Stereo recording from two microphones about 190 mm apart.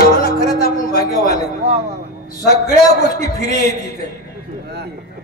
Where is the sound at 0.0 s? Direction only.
55° left (ahead or behind).